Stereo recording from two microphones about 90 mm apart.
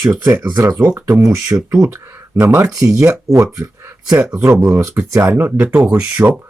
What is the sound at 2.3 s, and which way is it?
Speech, 30° right (ahead or behind).